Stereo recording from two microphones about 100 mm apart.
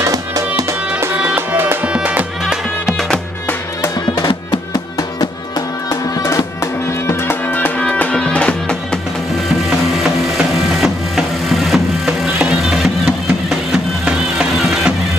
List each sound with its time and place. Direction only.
0.0 s music: 35° right (ahead or behind)
0.9 s music: 20° right (ahead or behind); by 3.1 s 5° right (ahead or behind)
4.3 s music: 55° left (ahead or behind)
4.9 s music: 40° left (ahead or behind); by 9.0 s 10° left (ahead or behind)
9.6 s wood: 5° right (ahead or behind)
14.0 s music: 5° right (ahead or behind)